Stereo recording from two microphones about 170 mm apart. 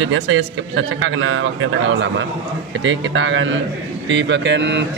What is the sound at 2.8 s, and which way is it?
A man's voice, 90° right.